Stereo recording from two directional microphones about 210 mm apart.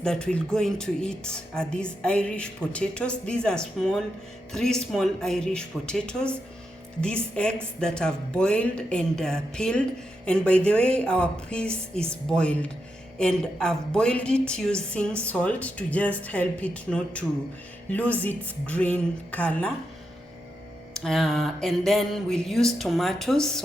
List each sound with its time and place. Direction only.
0.0 s a woman's voice: 5° left (ahead or behind)
20.9 s speech: centre (ahead or behind)